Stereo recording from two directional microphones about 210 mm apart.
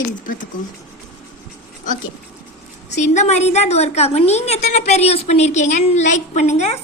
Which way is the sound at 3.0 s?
35° left (ahead or behind).